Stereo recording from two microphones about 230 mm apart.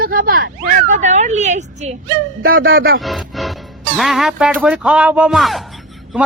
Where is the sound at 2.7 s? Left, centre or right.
Right.